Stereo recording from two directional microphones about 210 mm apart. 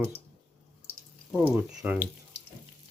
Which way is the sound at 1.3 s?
10° right (ahead or behind).